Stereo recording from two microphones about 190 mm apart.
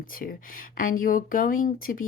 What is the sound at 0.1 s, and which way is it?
A woman's voice, 45° left (ahead or behind).